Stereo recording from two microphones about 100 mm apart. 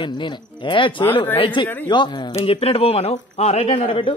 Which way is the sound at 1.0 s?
20° left (ahead or behind).